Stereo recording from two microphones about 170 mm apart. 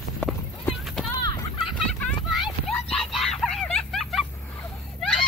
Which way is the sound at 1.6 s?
5° left (ahead or behind).